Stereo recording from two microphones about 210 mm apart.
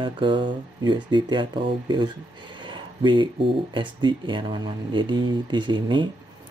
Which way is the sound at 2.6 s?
25° right (ahead or behind).